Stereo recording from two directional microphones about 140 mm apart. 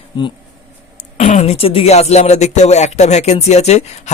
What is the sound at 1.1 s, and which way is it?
Speech, 55° left (ahead or behind).